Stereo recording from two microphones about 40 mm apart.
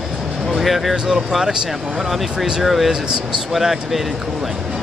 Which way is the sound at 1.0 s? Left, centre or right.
Centre.